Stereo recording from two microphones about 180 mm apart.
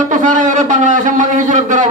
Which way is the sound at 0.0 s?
45° right (ahead or behind).